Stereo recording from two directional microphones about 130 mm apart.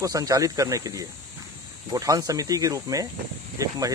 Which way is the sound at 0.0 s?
25° right (ahead or behind).